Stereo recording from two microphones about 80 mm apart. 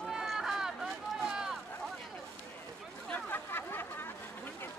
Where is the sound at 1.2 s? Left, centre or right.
Centre.